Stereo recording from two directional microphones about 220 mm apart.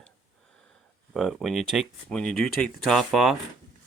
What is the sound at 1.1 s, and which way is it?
Speech, centre (ahead or behind).